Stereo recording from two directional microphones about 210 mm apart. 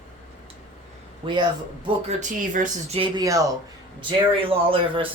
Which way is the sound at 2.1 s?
35° right (ahead or behind).